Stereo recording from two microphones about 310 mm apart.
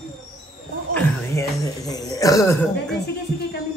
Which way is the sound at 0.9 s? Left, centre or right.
Centre.